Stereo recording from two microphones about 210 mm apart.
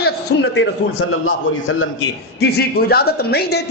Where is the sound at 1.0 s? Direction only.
75° left (ahead or behind).